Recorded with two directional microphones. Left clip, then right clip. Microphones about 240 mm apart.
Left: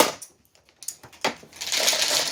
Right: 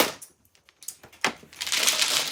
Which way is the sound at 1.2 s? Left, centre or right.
Centre.